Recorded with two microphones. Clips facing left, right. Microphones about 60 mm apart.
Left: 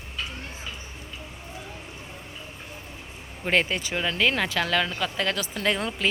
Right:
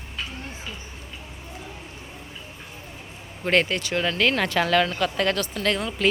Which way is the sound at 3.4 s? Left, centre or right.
Centre.